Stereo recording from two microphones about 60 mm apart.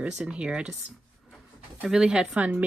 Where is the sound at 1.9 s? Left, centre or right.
Centre.